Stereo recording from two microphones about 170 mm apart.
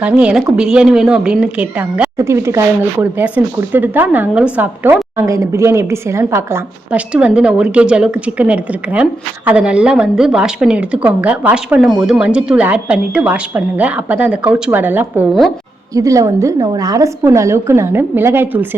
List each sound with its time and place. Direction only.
0.0 s a woman's voice: 5° right (ahead or behind)